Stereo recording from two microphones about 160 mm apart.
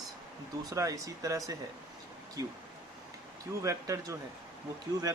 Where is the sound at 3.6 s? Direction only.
20° right (ahead or behind).